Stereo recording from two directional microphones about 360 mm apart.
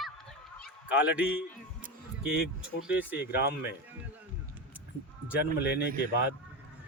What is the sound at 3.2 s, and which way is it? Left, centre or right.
Speech, left.